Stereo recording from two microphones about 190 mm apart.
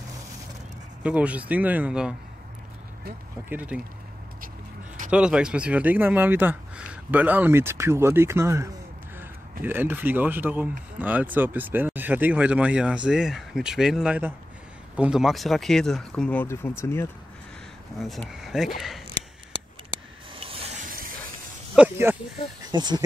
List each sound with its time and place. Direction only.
1.0 s speech: 5° right (ahead or behind)
3.4 s speech: 10° right (ahead or behind)
5.1 s speech: 5° right (ahead or behind); by 17.1 s 15° left (ahead or behind)
18.0 s speech: centre (ahead or behind)
19.1 s scissors: 25° right (ahead or behind)
21.7 s speech: 10° right (ahead or behind)
22.7 s speech: 20° right (ahead or behind)